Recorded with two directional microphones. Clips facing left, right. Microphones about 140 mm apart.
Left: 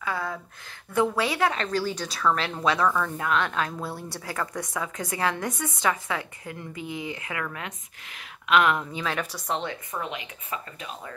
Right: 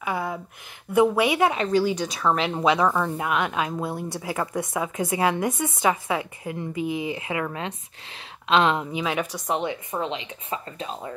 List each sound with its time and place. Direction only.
0.0 s a sound: 20° right (ahead or behind)
0.9 s speech: 15° right (ahead or behind)
8.9 s speech: 15° right (ahead or behind)